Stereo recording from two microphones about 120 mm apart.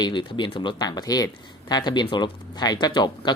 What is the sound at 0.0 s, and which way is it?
Speech, 40° left (ahead or behind).